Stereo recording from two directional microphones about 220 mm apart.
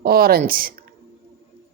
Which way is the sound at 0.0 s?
45° right (ahead or behind).